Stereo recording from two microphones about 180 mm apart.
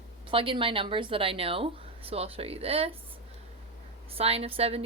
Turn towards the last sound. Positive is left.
turn(degrees=-35)  # may be behind; listen again after turning